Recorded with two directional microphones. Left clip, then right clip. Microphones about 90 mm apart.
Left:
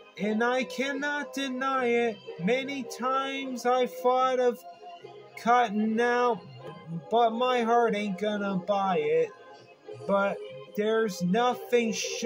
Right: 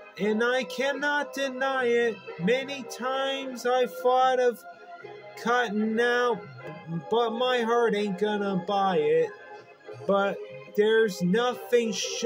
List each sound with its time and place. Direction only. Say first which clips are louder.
0.2 s music: right 2 dB; 50° right (ahead or behind)
10.0 s speech: right 1 dB; 50° right (ahead or behind)
10.8 s music: right 5 dB; 45° right (ahead or behind)